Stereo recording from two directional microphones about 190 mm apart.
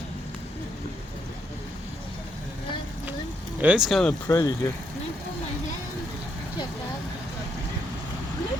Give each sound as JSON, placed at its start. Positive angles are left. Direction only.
{"t": 3.6, "sound": "speech", "side_deg": -5}
{"t": 4.3, "sound": "speech", "side_deg": 15}